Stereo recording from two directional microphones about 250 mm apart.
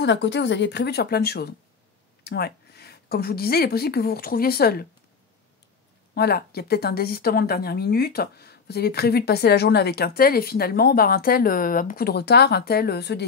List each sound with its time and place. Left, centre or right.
0.0 s a woman's voice: left
6.1 s speech: left